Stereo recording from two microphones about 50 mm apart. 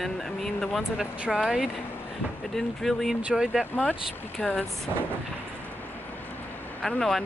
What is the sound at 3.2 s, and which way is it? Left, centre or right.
Speech, centre.